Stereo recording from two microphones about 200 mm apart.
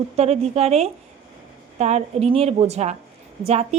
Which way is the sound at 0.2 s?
35° right (ahead or behind).